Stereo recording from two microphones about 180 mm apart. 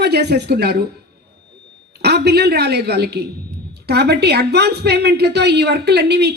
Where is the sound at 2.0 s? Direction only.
65° right (ahead or behind).